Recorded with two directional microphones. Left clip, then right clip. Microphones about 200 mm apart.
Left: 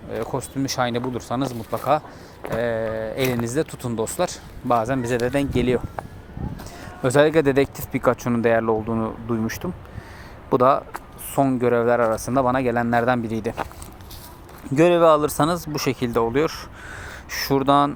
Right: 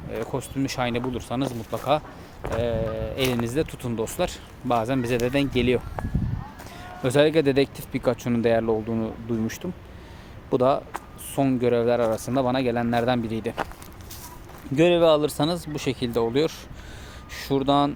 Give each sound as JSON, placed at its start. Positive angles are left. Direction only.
{"t": 0.3, "sound": "speech", "side_deg": 5}
{"t": 7.0, "sound": "speech", "side_deg": 15}
{"t": 14.8, "sound": "speech", "side_deg": 15}